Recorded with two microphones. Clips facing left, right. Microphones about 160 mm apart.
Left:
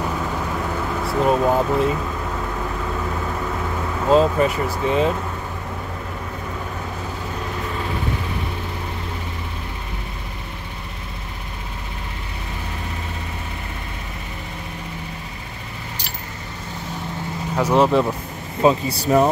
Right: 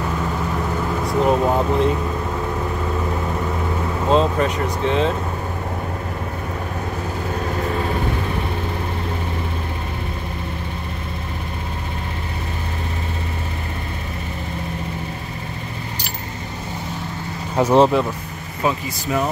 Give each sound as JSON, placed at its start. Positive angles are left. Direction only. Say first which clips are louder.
{"t": 1.0, "sound": "speech", "louder": "even", "side_deg": 0}
{"t": 4.1, "sound": "speech", "louder": "left 2 dB", "side_deg": 5}
{"t": 17.6, "sound": "speech", "louder": "right 3 dB", "side_deg": -25}
{"t": 18.6, "sound": "speech", "louder": "left 5 dB", "side_deg": 30}